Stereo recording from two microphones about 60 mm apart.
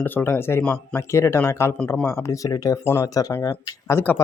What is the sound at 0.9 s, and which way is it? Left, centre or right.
Speech, left.